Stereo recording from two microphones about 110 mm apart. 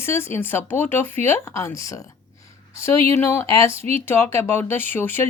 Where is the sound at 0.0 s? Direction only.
20° left (ahead or behind).